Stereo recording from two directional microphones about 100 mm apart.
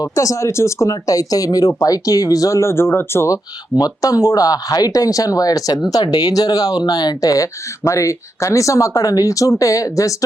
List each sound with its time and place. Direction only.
0.0 s speech: 35° left (ahead or behind)
3.8 s speech: 40° left (ahead or behind)